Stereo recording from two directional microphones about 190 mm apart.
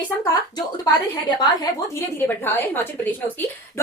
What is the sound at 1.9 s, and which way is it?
A woman's voice, 10° left (ahead or behind).